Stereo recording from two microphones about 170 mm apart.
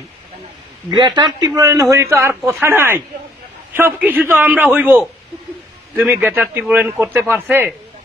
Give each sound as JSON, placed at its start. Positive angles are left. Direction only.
{"t": 0.8, "sound": "a man's voice", "side_deg": -25}
{"t": 4.0, "sound": "a man's voice", "side_deg": -10}